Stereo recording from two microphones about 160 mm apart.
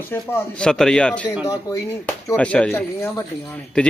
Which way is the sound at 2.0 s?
10° left (ahead or behind).